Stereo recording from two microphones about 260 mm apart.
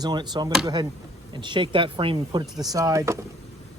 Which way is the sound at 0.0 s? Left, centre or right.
Centre.